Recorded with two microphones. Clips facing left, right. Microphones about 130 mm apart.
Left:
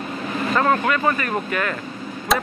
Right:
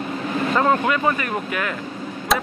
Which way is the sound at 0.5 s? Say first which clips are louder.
Even; 15° right (ahead or behind).